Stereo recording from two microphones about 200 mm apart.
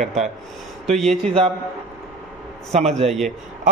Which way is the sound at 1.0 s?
Centre (ahead or behind).